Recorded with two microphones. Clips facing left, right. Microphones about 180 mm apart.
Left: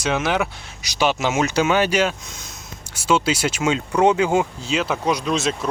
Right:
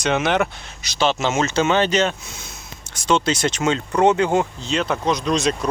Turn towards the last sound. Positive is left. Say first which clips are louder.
# right 2 dB
turn(degrees=5)  # may be behind; listen again after turning